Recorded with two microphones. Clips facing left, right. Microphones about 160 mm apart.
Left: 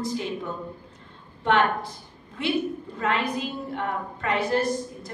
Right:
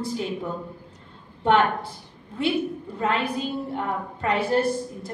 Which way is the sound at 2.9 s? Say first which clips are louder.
Right 2 dB; 30° right (ahead or behind).